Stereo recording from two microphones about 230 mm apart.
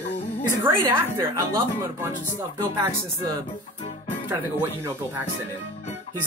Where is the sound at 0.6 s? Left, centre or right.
Centre.